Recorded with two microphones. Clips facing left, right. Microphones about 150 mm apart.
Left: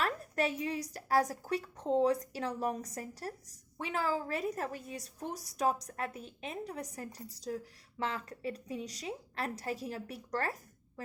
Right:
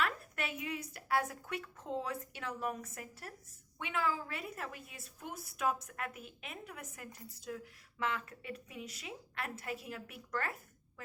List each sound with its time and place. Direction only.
0.0 s a woman's voice: 35° left (ahead or behind)